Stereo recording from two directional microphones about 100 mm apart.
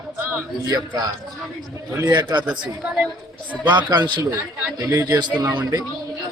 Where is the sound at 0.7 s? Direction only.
40° right (ahead or behind).